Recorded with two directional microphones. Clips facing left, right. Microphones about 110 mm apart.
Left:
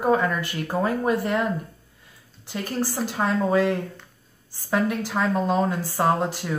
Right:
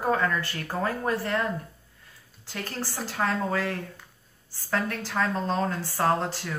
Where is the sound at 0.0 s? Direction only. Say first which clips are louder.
Left 4 dB; 15° left (ahead or behind).